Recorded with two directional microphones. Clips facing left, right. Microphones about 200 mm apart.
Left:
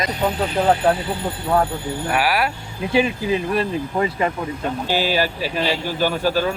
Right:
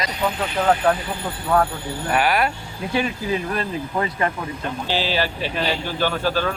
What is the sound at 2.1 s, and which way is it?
Speech, 5° left (ahead or behind).